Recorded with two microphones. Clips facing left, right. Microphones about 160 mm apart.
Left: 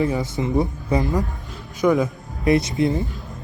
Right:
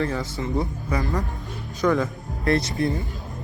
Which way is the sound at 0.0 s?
20° left (ahead or behind).